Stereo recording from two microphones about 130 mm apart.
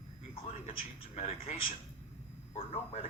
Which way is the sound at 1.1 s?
50° left (ahead or behind).